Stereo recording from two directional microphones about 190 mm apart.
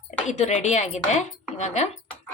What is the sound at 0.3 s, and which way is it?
Speech, 35° left (ahead or behind).